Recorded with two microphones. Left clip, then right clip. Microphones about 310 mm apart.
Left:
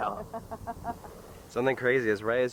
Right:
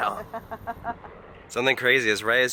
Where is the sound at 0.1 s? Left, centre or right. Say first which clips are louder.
Right 4 dB; centre.